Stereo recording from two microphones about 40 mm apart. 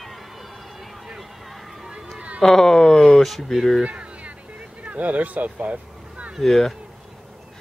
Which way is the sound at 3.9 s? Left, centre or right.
Right.